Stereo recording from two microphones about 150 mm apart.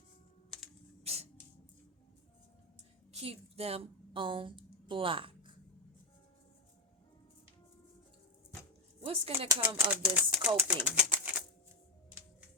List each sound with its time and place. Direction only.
1.0 s a sound: 45° right (ahead or behind)
3.2 s a woman's voice: 40° right (ahead or behind)
9.0 s speech: 40° right (ahead or behind)
9.6 s speech: 10° right (ahead or behind)
10.8 s bird: 10° right (ahead or behind)